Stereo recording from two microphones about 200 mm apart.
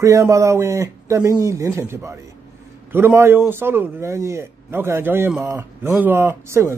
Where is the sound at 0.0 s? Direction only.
15° right (ahead or behind).